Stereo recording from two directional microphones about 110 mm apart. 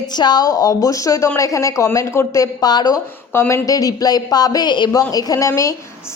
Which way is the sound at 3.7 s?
35° left (ahead or behind).